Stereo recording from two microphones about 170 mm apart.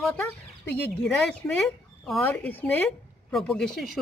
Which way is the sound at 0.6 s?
75° left (ahead or behind).